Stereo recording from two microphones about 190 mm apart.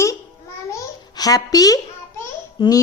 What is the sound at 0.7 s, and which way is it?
Babbling, 20° left (ahead or behind).